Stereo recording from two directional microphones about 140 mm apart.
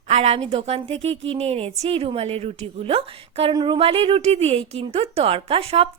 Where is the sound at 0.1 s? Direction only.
50° right (ahead or behind).